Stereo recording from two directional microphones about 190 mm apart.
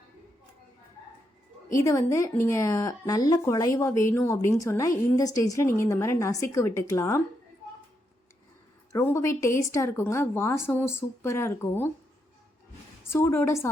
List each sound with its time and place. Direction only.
1.7 s speech: 15° left (ahead or behind)
8.9 s speech: 15° left (ahead or behind)
13.1 s speech: 15° left (ahead or behind)